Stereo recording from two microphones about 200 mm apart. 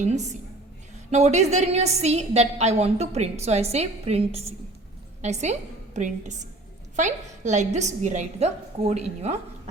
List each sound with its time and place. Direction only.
1.1 s a woman's voice: 35° right (ahead or behind)